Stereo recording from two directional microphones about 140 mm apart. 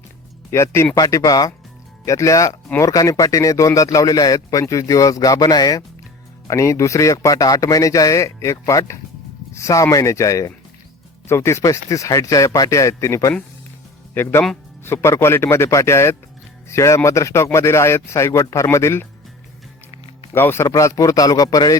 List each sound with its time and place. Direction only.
0.5 s speech: 20° left (ahead or behind)
20.3 s speech: 15° left (ahead or behind)